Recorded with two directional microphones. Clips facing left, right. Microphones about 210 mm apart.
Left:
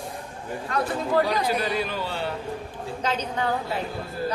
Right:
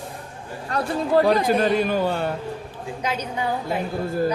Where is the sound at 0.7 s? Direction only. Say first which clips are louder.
Right 1 dB; 35° right (ahead or behind).